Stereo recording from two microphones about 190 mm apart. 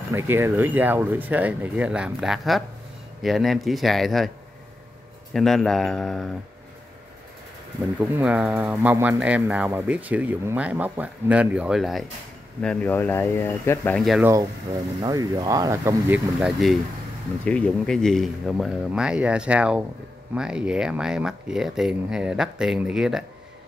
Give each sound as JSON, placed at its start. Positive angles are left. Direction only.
{"t": 0.1, "sound": "speech", "side_deg": -15}
{"t": 5.3, "sound": "speech", "side_deg": 0}
{"t": 8.0, "sound": "speech", "side_deg": -10}
{"t": 12.6, "sound": "speech", "side_deg": 10}
{"t": 14.0, "sound": "speech", "side_deg": 0}
{"t": 15.0, "sound": "speech", "side_deg": -20}